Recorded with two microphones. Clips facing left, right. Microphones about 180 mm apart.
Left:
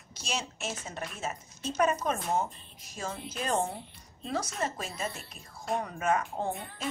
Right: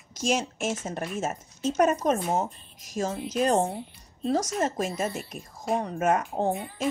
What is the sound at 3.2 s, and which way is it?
Speech, centre (ahead or behind).